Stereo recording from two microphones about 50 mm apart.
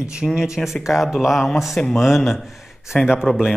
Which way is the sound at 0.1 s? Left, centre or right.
Centre.